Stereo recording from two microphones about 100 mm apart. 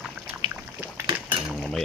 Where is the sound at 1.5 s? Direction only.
5° left (ahead or behind).